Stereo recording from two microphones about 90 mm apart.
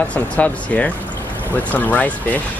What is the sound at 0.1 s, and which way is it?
Speech, 15° left (ahead or behind).